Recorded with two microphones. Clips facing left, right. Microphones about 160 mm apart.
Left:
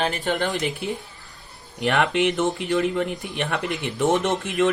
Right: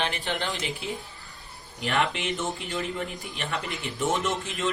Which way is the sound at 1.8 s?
70° left (ahead or behind).